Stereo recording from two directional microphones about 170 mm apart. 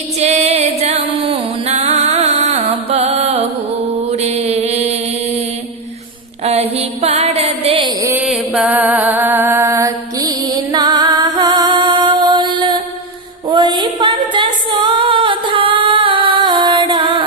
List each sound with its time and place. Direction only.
0.2 s music: 40° right (ahead or behind)
4.1 s mantra: 40° right (ahead or behind)
6.4 s a sound: 40° right (ahead or behind)
8.2 s music: 5° right (ahead or behind); by 12.8 s 25° right (ahead or behind)
13.5 s female singing: 25° right (ahead or behind)